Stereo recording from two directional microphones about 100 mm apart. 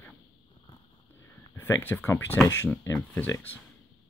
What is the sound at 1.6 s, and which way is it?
Speech, 20° left (ahead or behind).